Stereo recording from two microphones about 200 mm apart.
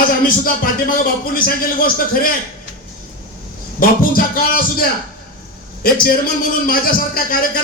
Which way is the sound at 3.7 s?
45° left (ahead or behind).